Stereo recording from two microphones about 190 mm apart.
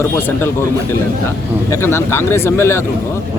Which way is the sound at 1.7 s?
15° left (ahead or behind).